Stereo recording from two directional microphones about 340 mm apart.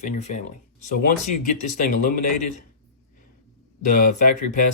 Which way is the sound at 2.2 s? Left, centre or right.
Left.